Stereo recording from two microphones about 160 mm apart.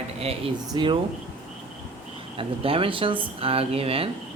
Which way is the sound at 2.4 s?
35° right (ahead or behind).